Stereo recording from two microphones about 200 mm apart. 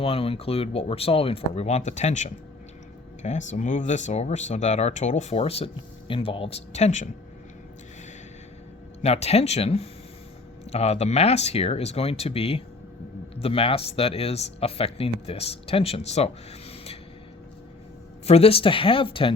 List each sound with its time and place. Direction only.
0.0 s speech: 30° left (ahead or behind)
9.0 s speech: 30° left (ahead or behind)
18.3 s speech: 30° left (ahead or behind)